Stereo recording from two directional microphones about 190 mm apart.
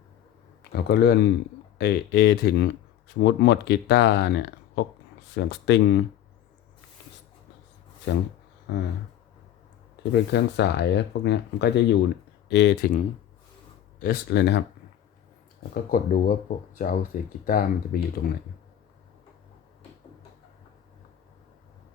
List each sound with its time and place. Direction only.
0.7 s speech: 55° left (ahead or behind)
8.1 s speech: 70° left (ahead or behind)
10.1 s speech: 65° left (ahead or behind)
14.0 s speech: 55° left (ahead or behind)
15.7 s speech: 45° left (ahead or behind)